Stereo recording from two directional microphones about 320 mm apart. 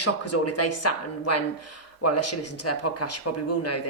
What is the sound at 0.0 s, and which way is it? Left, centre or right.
Speech, left.